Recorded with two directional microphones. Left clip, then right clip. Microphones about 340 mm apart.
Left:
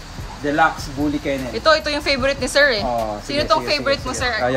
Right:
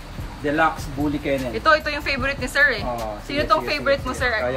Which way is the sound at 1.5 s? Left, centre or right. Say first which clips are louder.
Left 3 dB; centre.